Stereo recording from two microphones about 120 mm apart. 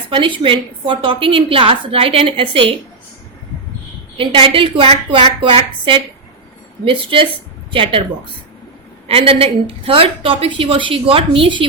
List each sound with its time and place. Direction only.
0.1 s a woman's voice: 45° right (ahead or behind)
4.2 s a woman's voice: 50° right (ahead or behind)
9.0 s a woman's voice: 50° right (ahead or behind)